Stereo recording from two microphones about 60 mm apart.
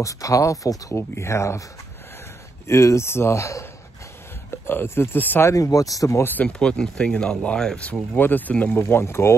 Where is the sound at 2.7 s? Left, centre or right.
Left.